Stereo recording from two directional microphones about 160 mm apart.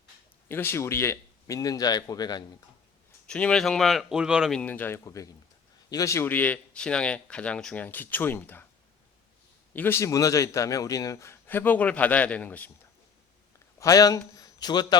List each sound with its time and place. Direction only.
0.4 s speech: 15° left (ahead or behind)
3.2 s speech: 5° left (ahead or behind)
4.6 s a man's voice: 10° left (ahead or behind)
9.7 s a man's voice: 15° left (ahead or behind)
13.7 s a man's voice: 20° left (ahead or behind)